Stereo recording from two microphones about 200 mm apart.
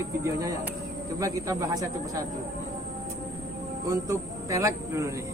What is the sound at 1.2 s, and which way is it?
Speech, 15° right (ahead or behind).